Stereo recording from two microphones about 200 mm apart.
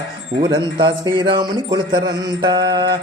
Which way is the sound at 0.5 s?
25° right (ahead or behind).